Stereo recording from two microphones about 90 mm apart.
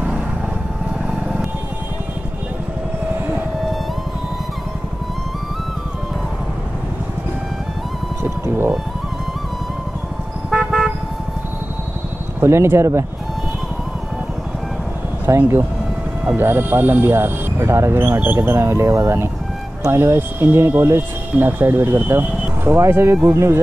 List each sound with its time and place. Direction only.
8.2 s vehicle: 25° right (ahead or behind)
10.5 s car: centre (ahead or behind)
12.4 s speech: 30° right (ahead or behind)
15.2 s speech: 30° right (ahead or behind)